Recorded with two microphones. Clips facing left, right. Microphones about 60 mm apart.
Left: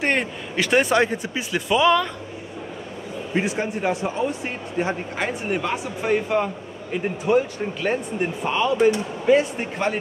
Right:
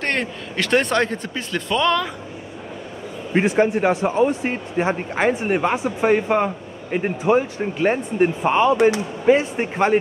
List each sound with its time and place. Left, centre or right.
0.0 s speech: centre
3.3 s speech: right